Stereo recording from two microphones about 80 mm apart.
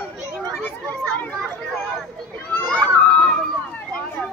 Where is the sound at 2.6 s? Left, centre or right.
Centre.